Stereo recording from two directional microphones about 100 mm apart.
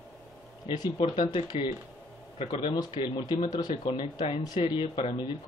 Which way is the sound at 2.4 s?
55° left (ahead or behind).